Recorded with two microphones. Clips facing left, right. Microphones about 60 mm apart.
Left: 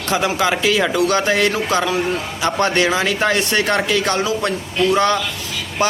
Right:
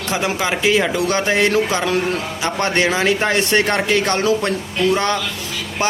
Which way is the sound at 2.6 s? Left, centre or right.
Right.